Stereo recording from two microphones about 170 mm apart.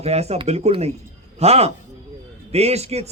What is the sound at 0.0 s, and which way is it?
A man's voice, 40° right (ahead or behind).